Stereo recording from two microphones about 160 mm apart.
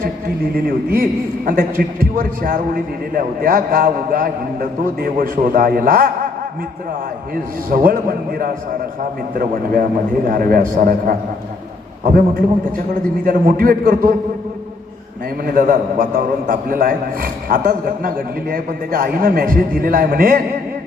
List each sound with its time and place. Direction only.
0.5 s a man's voice: 65° right (ahead or behind)
7.7 s a man's voice: 60° right (ahead or behind)
15.4 s a man's voice: 55° right (ahead or behind)